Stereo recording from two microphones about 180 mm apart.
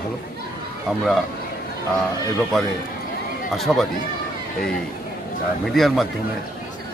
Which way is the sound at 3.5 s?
Centre (ahead or behind).